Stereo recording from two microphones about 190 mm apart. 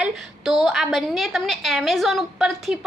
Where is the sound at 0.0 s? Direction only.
Centre (ahead or behind).